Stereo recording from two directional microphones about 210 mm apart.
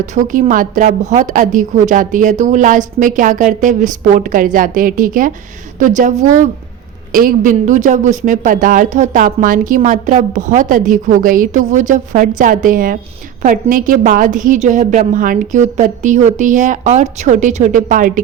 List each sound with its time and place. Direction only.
0.0 s a woman's voice: 35° right (ahead or behind)